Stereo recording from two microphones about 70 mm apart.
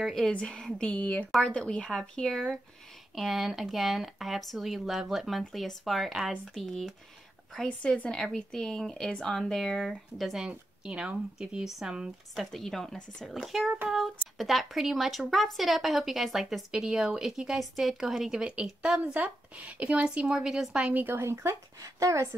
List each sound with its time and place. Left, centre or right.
0.0 s a woman's voice: centre
7.5 s a woman's voice: centre
10.4 s a woman's voice: centre
12.4 s a woman's voice: centre
20.9 s speech: right
21.8 s a woman's voice: right